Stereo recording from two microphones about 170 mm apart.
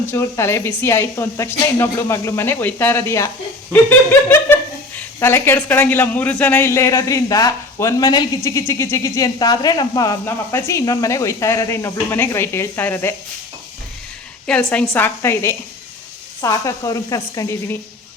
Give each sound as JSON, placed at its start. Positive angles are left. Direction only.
{"t": 0.1, "sound": "speech", "side_deg": 15}
{"t": 14.4, "sound": "a woman's voice", "side_deg": 5}